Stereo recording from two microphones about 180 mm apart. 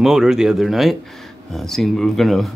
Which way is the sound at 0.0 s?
5° right (ahead or behind).